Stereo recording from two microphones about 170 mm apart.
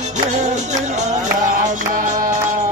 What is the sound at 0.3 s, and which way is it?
Music, 45° right (ahead or behind).